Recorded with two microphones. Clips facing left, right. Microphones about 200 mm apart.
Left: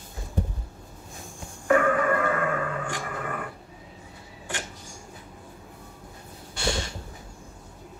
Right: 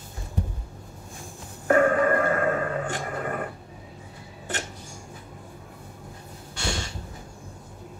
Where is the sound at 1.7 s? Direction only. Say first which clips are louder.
Right 2 dB; 40° right (ahead or behind).